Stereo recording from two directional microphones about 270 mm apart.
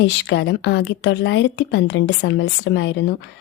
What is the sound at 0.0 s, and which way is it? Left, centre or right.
A woman's voice, left.